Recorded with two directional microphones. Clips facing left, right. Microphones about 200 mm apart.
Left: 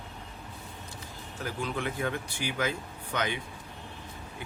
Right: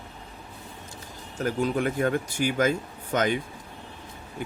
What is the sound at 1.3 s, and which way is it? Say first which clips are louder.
Speech: right 8 dB; 45° right (ahead or behind).